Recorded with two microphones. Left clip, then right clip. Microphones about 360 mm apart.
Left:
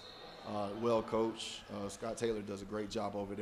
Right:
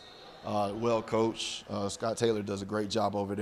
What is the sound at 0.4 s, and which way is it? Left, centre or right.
Speech, right.